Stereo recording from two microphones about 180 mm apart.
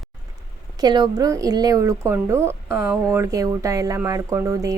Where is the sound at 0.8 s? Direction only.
25° right (ahead or behind).